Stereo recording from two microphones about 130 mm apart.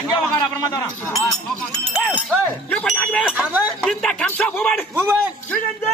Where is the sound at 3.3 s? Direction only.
10° right (ahead or behind).